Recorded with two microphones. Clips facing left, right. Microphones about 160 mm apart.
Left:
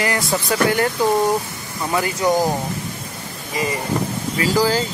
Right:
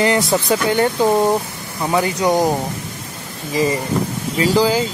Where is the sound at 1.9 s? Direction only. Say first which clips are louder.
Right 2 dB; 20° right (ahead or behind).